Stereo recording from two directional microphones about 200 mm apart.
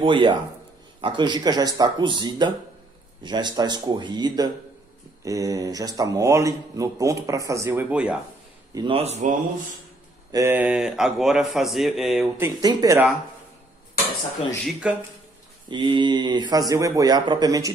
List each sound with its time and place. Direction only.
0.0 s speech: 25° right (ahead or behind); by 8.2 s 5° right (ahead or behind)
8.7 s speech: 25° right (ahead or behind)
10.3 s speech: 10° right (ahead or behind)
12.4 s speech: 15° right (ahead or behind)
14.6 s speech: 5° right (ahead or behind)
15.7 s speech: 25° right (ahead or behind)